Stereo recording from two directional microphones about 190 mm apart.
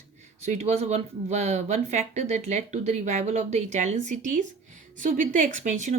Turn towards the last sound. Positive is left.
turn(degrees=-40)  # may be behind; listen again after turning